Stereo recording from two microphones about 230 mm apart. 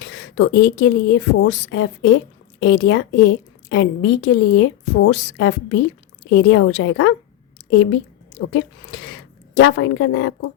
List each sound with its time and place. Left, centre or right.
0.0 s speech: left
8.4 s a woman's voice: left